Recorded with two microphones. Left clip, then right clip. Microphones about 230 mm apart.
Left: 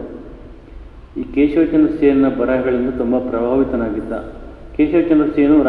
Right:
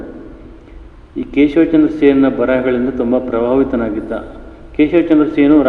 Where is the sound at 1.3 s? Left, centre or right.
Right.